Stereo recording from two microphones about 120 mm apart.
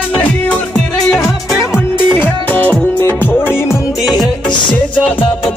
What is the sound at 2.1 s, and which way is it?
Music, 15° left (ahead or behind).